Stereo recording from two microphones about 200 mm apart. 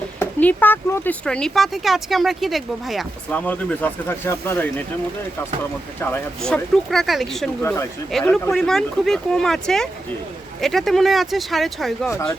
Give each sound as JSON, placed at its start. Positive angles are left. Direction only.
{"t": 0.2, "sound": "speech", "side_deg": 10}
{"t": 6.0, "sound": "speech", "side_deg": 5}
{"t": 7.6, "sound": "speech", "side_deg": 10}